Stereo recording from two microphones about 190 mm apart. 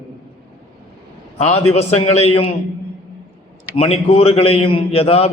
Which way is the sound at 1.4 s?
35° left (ahead or behind).